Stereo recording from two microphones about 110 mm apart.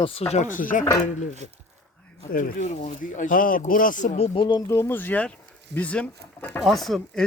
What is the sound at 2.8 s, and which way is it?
Speech, 90° left.